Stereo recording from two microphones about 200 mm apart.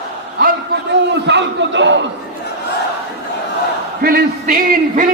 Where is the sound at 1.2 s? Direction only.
60° right (ahead or behind).